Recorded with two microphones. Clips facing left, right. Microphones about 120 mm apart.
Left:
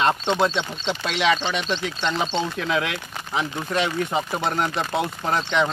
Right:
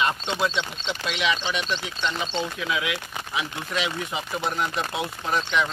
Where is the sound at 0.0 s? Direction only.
45° left (ahead or behind).